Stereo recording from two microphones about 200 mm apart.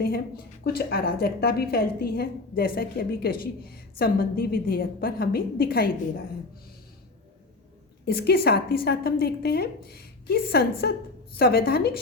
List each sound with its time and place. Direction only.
0.0 s a woman's voice: 50° left (ahead or behind)
8.0 s a woman's voice: 50° left (ahead or behind)